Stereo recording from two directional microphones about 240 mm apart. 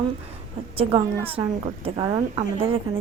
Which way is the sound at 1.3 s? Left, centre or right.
Right.